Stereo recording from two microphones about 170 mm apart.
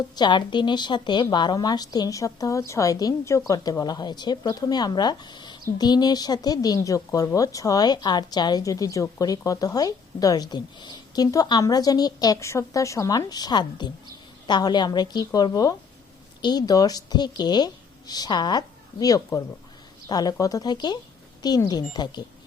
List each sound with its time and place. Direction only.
0.2 s a woman's voice: 25° left (ahead or behind)